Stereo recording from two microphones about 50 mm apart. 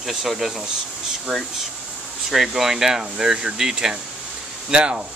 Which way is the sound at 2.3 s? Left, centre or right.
Centre.